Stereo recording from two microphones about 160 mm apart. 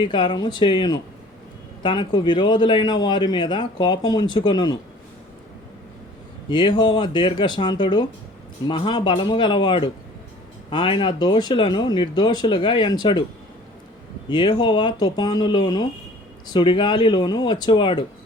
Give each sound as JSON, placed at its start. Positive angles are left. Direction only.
{"t": 0.0, "sound": "a man's voice", "side_deg": 30}
{"t": 6.5, "sound": "a man's voice", "side_deg": 30}
{"t": 14.3, "sound": "a man's voice", "side_deg": 30}